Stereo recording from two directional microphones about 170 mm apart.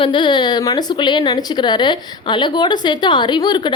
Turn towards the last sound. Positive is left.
turn(degrees=25)  # may be behind; listen again after turning